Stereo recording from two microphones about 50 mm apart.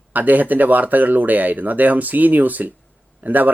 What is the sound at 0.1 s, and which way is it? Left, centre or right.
Speech, right.